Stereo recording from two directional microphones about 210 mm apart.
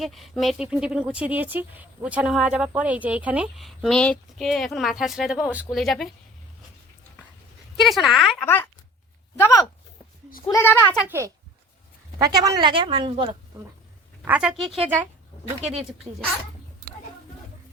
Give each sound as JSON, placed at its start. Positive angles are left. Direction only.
{"t": 0.0, "sound": "speech", "side_deg": 0}
{"t": 7.8, "sound": "speech", "side_deg": 0}
{"t": 9.4, "sound": "speech", "side_deg": 15}
{"t": 11.0, "sound": "a child's voice", "side_deg": -10}
{"t": 14.3, "sound": "a child's voice", "side_deg": -5}